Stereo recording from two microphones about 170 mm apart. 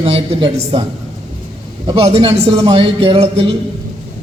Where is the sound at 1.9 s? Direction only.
35° right (ahead or behind).